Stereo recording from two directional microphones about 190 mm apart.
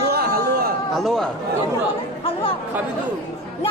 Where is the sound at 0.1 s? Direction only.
55° right (ahead or behind).